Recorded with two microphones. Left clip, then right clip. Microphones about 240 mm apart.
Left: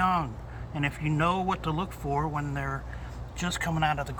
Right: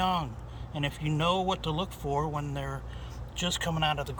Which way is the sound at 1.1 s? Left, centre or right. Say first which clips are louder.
Even; centre.